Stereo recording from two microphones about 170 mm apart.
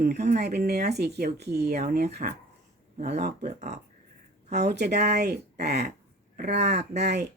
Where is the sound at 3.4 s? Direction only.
45° right (ahead or behind).